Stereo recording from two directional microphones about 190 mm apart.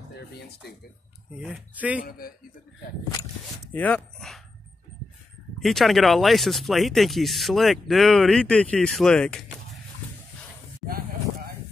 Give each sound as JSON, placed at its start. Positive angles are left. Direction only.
{"t": 1.3, "sound": "speech", "side_deg": -5}
{"t": 2.0, "sound": "a man's voice", "side_deg": 50}
{"t": 3.7, "sound": "speech", "side_deg": 5}
{"t": 5.6, "sound": "speech", "side_deg": 0}
{"t": 10.9, "sound": "a sound", "side_deg": -50}